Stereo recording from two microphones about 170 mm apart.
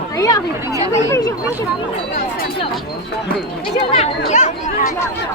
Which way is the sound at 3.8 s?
40° left (ahead or behind).